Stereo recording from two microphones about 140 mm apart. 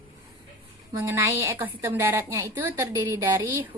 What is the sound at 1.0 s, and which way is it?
A woman's voice, 15° right (ahead or behind).